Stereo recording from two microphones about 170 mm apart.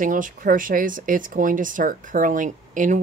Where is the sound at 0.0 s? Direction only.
50° right (ahead or behind).